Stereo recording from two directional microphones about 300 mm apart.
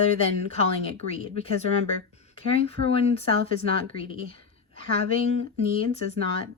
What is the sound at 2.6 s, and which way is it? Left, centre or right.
Speech, centre.